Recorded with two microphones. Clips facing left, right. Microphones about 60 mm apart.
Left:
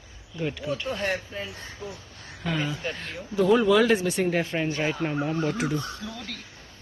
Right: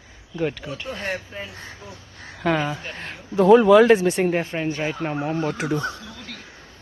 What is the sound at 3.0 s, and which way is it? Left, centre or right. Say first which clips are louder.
Speech: right 6 dB; right.